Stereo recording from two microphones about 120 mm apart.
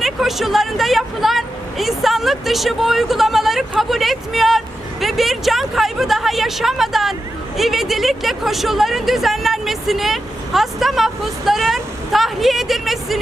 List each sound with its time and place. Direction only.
0.0 s speech: centre (ahead or behind)